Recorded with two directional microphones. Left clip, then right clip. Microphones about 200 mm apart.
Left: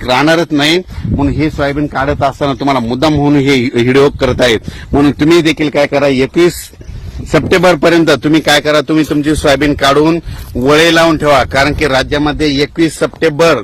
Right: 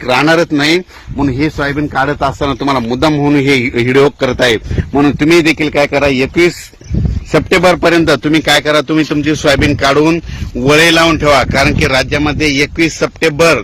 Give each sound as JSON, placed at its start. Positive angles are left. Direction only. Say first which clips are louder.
{"t": 0.1, "sound": "a man's voice", "louder": "even", "side_deg": 55}